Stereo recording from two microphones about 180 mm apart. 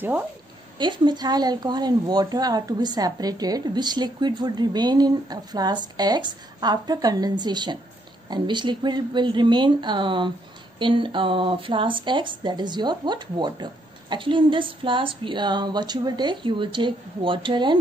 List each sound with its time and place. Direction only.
0.7 s a woman's voice: 25° right (ahead or behind)